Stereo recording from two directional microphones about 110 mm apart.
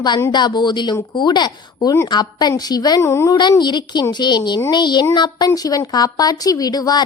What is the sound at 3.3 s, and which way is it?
A woman's voice, 45° left (ahead or behind).